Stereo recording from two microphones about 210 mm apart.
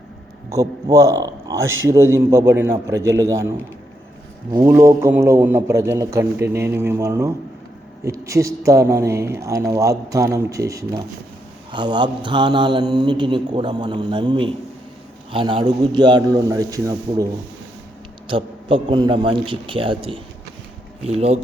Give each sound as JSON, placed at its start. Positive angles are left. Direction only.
{"t": 0.5, "sound": "speech", "side_deg": -15}
{"t": 4.5, "sound": "speech", "side_deg": -15}
{"t": 11.7, "sound": "mantra", "side_deg": -20}
{"t": 18.3, "sound": "mantra", "side_deg": -25}